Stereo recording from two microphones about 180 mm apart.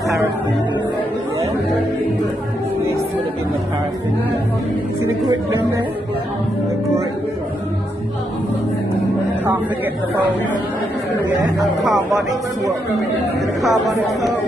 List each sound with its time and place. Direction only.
13.6 s speech: centre (ahead or behind)